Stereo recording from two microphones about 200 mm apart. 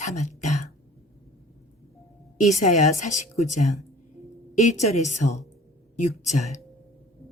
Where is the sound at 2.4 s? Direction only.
35° left (ahead or behind).